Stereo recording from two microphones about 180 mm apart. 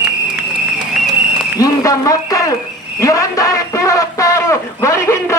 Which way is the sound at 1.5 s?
20° left (ahead or behind).